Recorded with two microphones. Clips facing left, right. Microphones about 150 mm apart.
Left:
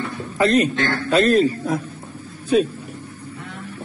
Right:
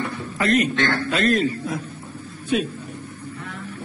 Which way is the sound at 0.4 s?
35° left (ahead or behind).